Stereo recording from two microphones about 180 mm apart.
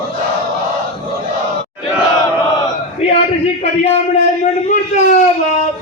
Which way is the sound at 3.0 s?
35° left (ahead or behind).